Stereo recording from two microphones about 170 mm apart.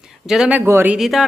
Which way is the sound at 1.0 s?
Centre (ahead or behind).